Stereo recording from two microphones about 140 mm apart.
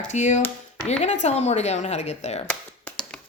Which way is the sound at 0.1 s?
60° left (ahead or behind).